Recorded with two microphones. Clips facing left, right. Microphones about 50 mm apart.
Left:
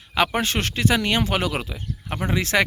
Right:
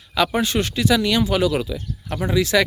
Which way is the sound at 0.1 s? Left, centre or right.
Left.